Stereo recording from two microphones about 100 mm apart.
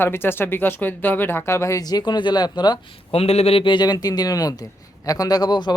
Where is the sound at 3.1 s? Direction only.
90° left.